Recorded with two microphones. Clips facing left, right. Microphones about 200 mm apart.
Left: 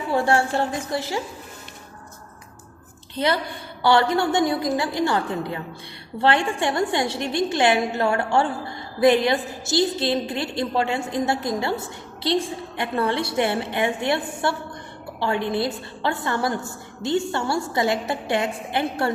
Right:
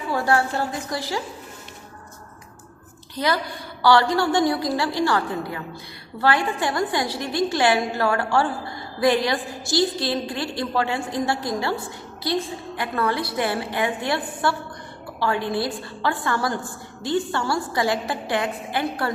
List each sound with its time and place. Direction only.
0.1 s a woman's voice: 25° left (ahead or behind)
3.2 s a woman's voice: 25° left (ahead or behind)